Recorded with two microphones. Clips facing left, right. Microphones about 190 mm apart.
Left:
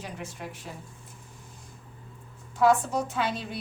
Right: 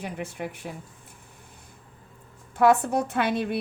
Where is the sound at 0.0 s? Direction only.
60° right (ahead or behind).